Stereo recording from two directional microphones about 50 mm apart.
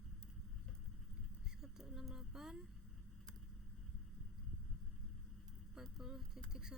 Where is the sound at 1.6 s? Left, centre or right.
Centre.